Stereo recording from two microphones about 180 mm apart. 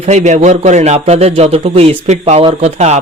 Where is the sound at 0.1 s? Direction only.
40° right (ahead or behind).